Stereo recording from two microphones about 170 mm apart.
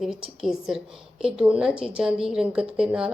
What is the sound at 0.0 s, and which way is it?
A woman's voice, 5° right (ahead or behind).